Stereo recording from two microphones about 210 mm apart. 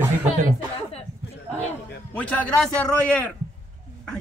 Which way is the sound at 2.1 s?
5° left (ahead or behind).